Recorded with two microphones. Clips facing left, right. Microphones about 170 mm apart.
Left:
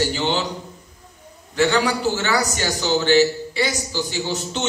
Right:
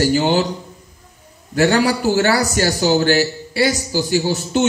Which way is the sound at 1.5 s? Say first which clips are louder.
Right 4 dB; 40° right (ahead or behind).